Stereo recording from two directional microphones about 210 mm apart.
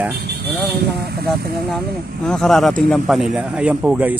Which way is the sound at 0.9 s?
50° right (ahead or behind).